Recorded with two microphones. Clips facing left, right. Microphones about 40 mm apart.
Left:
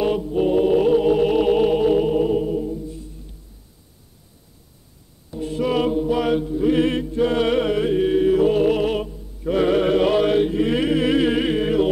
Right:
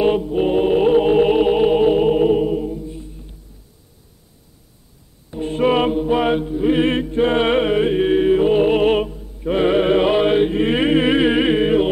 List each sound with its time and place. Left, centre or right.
0.0 s music: right
5.3 s mantra: right
9.4 s chant: right